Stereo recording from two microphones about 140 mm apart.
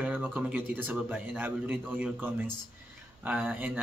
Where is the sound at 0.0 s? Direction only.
15° right (ahead or behind).